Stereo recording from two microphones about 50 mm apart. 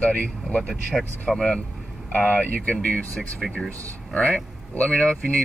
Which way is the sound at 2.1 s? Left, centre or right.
Left.